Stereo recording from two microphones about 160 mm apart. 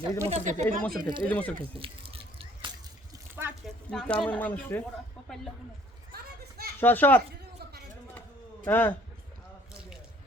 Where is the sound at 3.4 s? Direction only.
15° right (ahead or behind).